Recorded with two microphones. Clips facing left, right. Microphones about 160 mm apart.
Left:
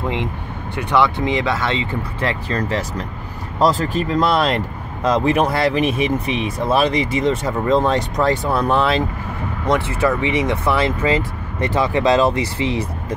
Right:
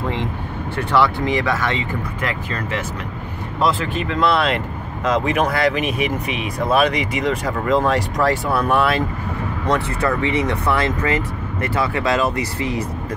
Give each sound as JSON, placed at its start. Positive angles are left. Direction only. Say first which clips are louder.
{"t": 0.7, "sound": "speech", "louder": "left 1 dB", "side_deg": 20}